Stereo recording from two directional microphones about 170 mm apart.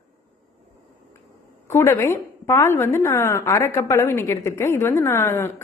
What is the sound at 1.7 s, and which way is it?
A woman's voice, 15° left (ahead or behind).